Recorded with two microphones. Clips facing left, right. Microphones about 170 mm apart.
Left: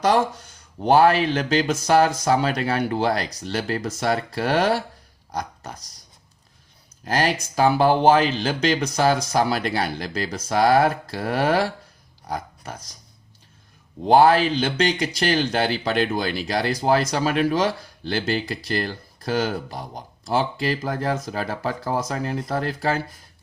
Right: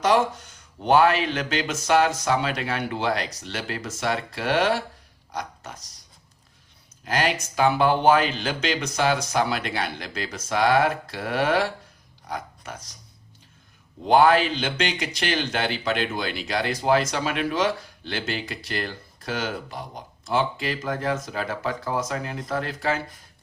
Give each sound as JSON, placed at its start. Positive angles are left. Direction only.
{"t": 0.9, "sound": "speech", "side_deg": 35}
{"t": 5.3, "sound": "a sound", "side_deg": 35}
{"t": 7.0, "sound": "speech", "side_deg": 35}
{"t": 14.1, "sound": "speech", "side_deg": 35}